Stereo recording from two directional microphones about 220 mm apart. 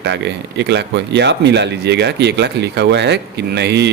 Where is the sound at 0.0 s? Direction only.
50° right (ahead or behind).